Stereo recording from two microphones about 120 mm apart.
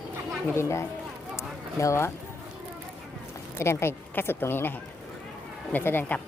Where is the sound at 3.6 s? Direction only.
20° left (ahead or behind).